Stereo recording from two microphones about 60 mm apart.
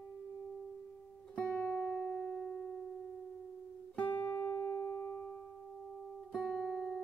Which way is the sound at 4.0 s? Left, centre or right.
Left.